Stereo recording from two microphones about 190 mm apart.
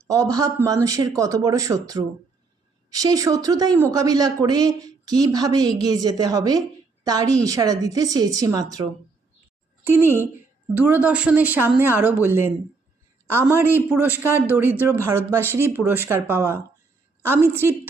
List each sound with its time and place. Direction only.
0.1 s a man's voice: 20° right (ahead or behind)